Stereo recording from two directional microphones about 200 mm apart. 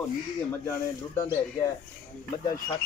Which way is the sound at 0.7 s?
15° left (ahead or behind).